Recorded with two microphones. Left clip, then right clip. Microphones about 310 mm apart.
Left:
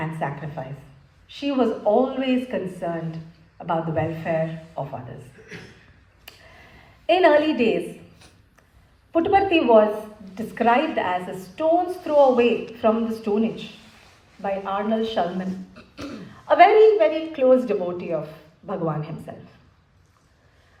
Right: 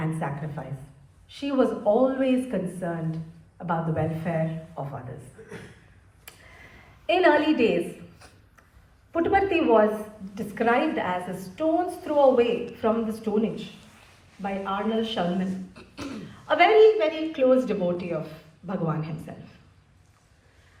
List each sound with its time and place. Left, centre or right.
1.3 s a woman's voice: left
7.1 s a woman's voice: centre
9.1 s a woman's voice: left
14.4 s a woman's voice: left
16.5 s a woman's voice: left